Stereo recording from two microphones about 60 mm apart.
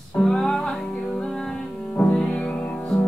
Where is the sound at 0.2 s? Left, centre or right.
Centre.